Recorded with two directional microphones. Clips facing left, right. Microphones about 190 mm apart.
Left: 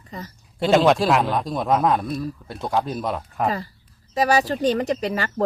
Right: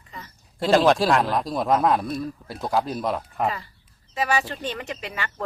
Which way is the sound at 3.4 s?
40° left (ahead or behind).